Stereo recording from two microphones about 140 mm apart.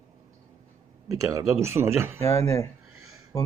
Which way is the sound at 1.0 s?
25° right (ahead or behind).